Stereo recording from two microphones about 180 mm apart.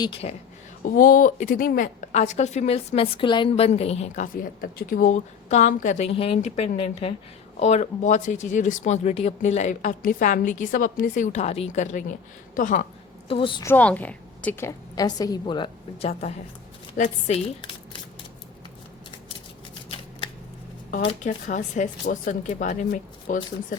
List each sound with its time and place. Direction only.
0.0 s a woman's voice: 30° left (ahead or behind)
0.8 s a woman's voice: 50° left (ahead or behind)
13.2 s a woman's voice: 30° left (ahead or behind)
13.7 s a woman's voice: 10° left (ahead or behind); by 17.4 s 40° left (ahead or behind)
21.2 s speech: 45° left (ahead or behind)